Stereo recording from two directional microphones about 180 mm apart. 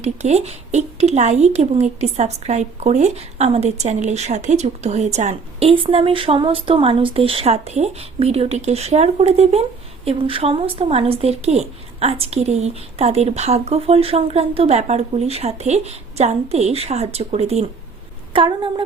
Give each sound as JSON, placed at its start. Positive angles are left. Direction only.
{"t": 0.0, "sound": "speech", "side_deg": -40}